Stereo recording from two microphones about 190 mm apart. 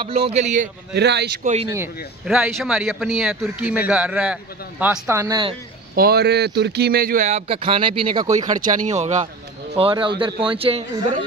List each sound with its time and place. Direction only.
0.0 s speech: 30° right (ahead or behind)
0.9 s speech: 60° right (ahead or behind)
1.4 s speech: 35° right (ahead or behind)
2.2 s speech: 5° right (ahead or behind); by 5.6 s 25° right (ahead or behind)
5.9 s speech: 55° right (ahead or behind); by 8.3 s 25° right (ahead or behind)
8.5 s a man's voice: 45° right (ahead or behind)